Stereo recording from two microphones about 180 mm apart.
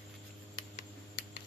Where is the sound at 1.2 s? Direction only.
65° left (ahead or behind).